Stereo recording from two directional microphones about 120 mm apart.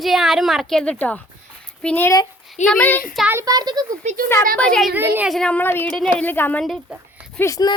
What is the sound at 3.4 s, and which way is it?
Speech, 35° right (ahead or behind).